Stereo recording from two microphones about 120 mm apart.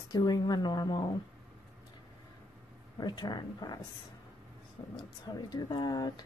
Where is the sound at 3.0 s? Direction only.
35° left (ahead or behind).